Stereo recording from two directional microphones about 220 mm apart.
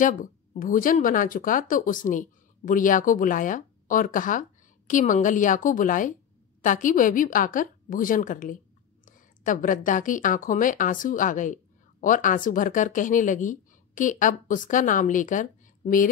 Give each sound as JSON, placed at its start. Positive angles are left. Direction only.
{"t": 0.0, "sound": "speech", "side_deg": 35}